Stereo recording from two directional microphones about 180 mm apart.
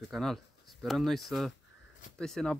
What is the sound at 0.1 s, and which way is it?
Speech, centre (ahead or behind).